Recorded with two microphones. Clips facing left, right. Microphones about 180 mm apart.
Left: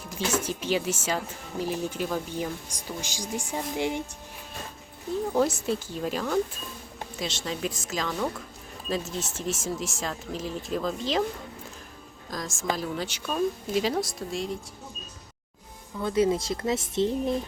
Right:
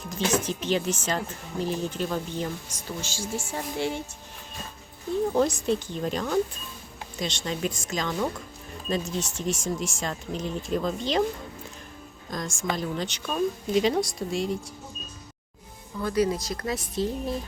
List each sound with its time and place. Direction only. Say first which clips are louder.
0.3 s speech: even; 10° left (ahead or behind)
5.3 s speech: even; 5° left (ahead or behind)
12.3 s speech: even; centre (ahead or behind)
16.0 s speech: left 1 dB; 25° left (ahead or behind)